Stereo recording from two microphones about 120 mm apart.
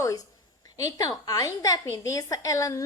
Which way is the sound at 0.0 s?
30° left (ahead or behind).